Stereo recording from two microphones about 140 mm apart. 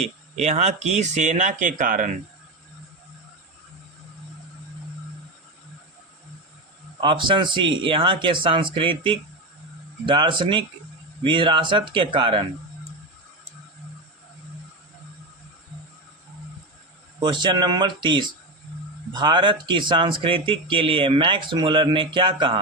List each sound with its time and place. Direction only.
0.0 s speech: 50° right (ahead or behind); by 2.1 s 70° right (ahead or behind)
7.0 s speech: 35° right (ahead or behind)
17.2 s speech: 30° right (ahead or behind)